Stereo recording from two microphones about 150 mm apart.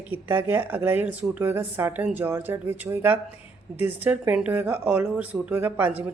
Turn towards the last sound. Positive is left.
turn(degrees=-10)  # may be behind; listen again after turning